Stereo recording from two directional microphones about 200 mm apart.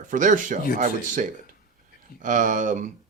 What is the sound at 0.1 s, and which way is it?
Speech, 40° right (ahead or behind).